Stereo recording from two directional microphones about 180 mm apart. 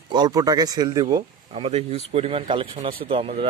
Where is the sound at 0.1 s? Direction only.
20° right (ahead or behind).